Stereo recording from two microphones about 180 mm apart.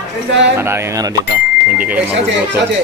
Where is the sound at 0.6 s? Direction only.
15° right (ahead or behind).